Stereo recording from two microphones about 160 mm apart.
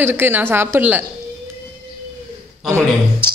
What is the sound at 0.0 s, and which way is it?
A woman's voice, 15° right (ahead or behind).